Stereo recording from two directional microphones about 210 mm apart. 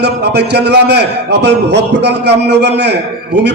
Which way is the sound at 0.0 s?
55° right (ahead or behind).